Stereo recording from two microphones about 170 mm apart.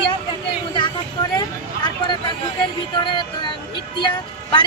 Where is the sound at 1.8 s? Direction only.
25° left (ahead or behind).